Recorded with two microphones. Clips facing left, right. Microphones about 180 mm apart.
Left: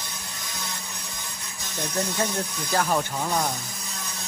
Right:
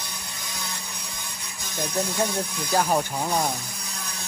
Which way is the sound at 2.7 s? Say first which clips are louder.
Right 1 dB; 20° right (ahead or behind).